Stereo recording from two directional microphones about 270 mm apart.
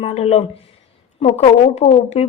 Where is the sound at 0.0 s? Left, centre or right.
Left.